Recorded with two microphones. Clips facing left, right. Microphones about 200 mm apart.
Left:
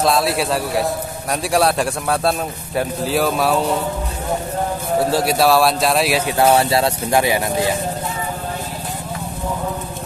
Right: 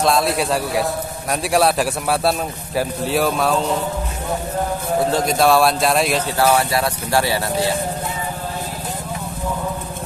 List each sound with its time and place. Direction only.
0.0 s a man's voice: centre (ahead or behind)
5.1 s a man's voice: 5° left (ahead or behind)
6.2 s speech: 20° left (ahead or behind)